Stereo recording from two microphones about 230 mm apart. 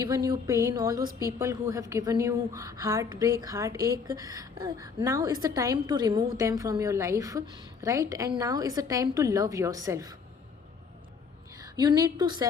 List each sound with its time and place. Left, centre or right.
0.0 s a woman's voice: centre
11.6 s a woman's voice: centre